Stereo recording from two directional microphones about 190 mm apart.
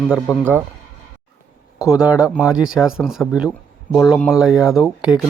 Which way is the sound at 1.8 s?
5° right (ahead or behind).